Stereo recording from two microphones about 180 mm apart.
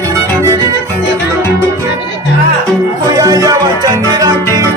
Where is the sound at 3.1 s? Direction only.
20° right (ahead or behind).